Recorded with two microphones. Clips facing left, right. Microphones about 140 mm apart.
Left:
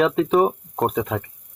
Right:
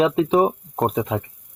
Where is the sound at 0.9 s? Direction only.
15° right (ahead or behind).